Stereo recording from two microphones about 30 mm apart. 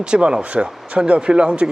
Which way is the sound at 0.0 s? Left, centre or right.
Right.